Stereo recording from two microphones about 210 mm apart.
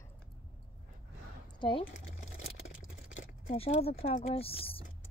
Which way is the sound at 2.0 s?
35° left (ahead or behind).